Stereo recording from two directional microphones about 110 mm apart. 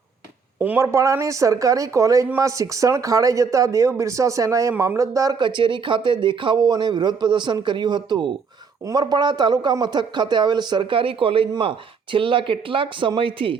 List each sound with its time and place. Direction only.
0.6 s speech: 15° right (ahead or behind)
0.9 s a man's voice: 25° right (ahead or behind)
5.4 s a man's voice: 45° right (ahead or behind)